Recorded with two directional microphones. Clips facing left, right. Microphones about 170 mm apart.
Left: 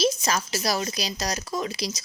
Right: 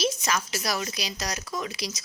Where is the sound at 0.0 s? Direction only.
35° left (ahead or behind).